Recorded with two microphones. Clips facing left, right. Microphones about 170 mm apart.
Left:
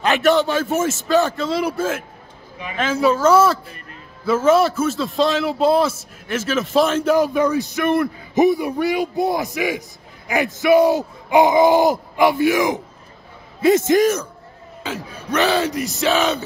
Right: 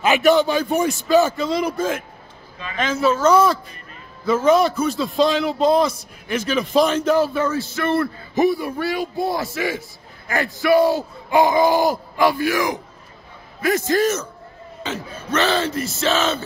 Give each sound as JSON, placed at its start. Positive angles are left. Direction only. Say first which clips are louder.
{"t": 0.0, "sound": "a man's voice", "louder": "right 1 dB", "side_deg": 0}
{"t": 14.0, "sound": "a man's voice", "louder": "left 2 dB", "side_deg": 10}